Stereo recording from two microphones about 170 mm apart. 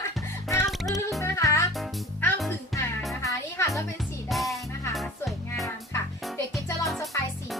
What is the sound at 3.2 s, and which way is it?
Music, 15° left (ahead or behind).